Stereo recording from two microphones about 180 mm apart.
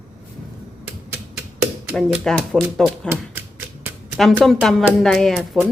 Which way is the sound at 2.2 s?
Centre (ahead or behind).